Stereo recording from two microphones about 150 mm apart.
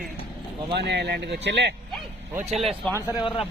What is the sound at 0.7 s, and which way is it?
Speech, 90° right.